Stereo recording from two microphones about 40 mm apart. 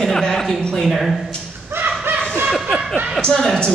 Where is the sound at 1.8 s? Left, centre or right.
Right.